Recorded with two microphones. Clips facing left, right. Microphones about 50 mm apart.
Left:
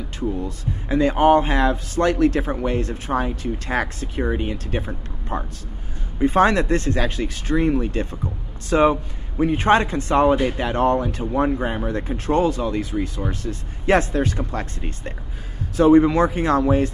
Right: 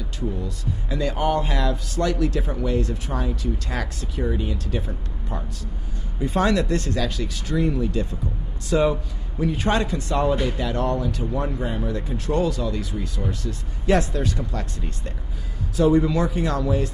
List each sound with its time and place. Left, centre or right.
0.4 s speech: left